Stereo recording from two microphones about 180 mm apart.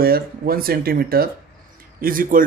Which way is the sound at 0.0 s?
55° right (ahead or behind).